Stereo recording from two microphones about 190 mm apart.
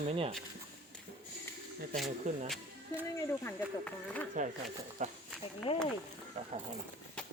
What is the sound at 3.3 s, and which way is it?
Speech, 10° left (ahead or behind).